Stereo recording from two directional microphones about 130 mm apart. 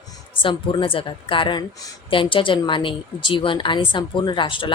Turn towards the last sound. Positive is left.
turn(degrees=40)  # may be behind; listen again after turning